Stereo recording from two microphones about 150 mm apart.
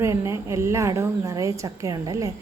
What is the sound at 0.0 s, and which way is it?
A woman's voice, 20° right (ahead or behind).